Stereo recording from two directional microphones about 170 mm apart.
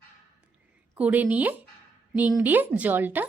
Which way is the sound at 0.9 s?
10° right (ahead or behind).